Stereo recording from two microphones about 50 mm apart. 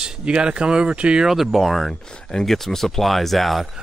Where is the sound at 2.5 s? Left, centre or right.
Centre.